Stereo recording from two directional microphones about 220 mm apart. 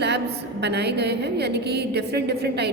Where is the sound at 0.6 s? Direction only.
50° right (ahead or behind).